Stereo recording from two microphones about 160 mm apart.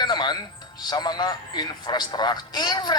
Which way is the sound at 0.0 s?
25° left (ahead or behind).